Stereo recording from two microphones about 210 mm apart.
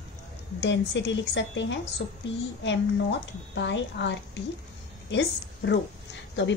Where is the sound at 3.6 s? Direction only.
60° left (ahead or behind).